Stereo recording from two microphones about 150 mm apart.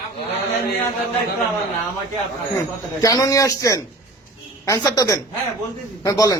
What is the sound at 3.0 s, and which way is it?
A man's voice, 25° left (ahead or behind).